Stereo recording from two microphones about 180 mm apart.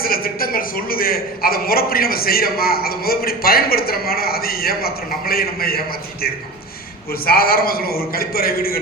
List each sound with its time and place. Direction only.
0.0 s a man's voice: 55° left (ahead or behind)
7.1 s a man's voice: 55° left (ahead or behind)